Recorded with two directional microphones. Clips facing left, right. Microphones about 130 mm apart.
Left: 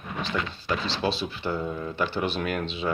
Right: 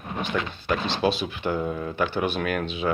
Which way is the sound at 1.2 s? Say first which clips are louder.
Right 3 dB; 15° right (ahead or behind).